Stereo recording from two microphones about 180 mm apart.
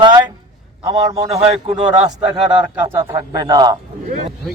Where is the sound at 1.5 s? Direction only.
35° right (ahead or behind).